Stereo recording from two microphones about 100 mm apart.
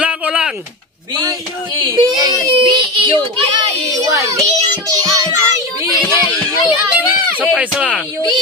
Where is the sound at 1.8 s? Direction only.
40° right (ahead or behind).